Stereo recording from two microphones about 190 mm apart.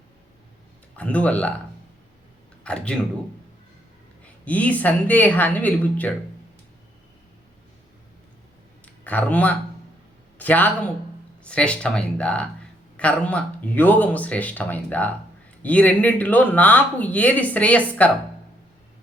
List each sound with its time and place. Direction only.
0.9 s speech: 5° left (ahead or behind)
2.6 s speech: 5° left (ahead or behind)
4.4 s speech: 5° left (ahead or behind)
8.8 s a sound: 10° left (ahead or behind)
10.3 s a man's voice: 10° left (ahead or behind)